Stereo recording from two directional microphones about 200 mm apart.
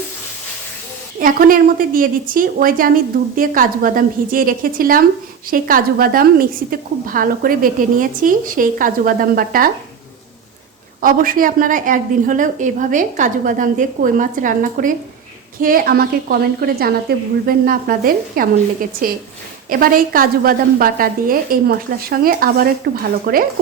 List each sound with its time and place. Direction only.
1.2 s a woman's voice: 45° right (ahead or behind)
11.0 s a woman's voice: 45° right (ahead or behind)